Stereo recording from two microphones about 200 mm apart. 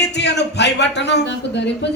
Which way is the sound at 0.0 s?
60° left (ahead or behind).